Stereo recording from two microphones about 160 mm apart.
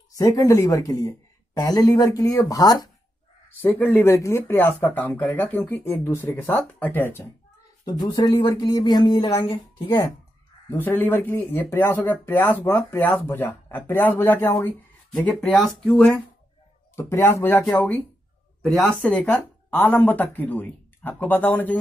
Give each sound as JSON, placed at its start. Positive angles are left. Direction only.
{"t": 0.1, "sound": "speech", "side_deg": 20}
{"t": 3.6, "sound": "speech", "side_deg": 10}
{"t": 7.8, "sound": "speech", "side_deg": 25}
{"t": 10.7, "sound": "speech", "side_deg": 15}
{"t": 15.2, "sound": "speech", "side_deg": 5}
{"t": 16.9, "sound": "speech", "side_deg": 15}